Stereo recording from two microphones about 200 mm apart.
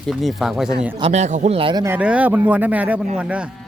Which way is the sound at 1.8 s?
10° right (ahead or behind).